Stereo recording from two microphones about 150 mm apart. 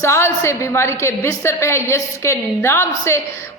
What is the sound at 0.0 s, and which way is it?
A man's voice, 20° left (ahead or behind).